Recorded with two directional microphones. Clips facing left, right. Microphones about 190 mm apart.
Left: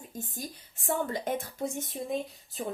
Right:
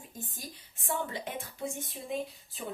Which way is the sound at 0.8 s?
45° left (ahead or behind).